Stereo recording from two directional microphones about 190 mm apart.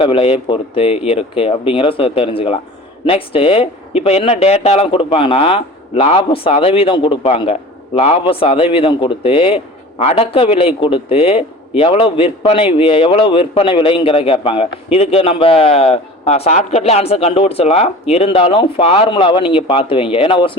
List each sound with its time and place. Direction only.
0.0 s a man's voice: 30° left (ahead or behind)